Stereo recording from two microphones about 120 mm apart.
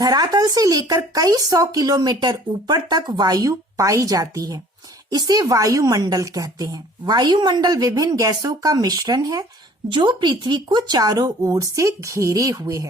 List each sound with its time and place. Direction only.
0.0 s speech: 30° right (ahead or behind)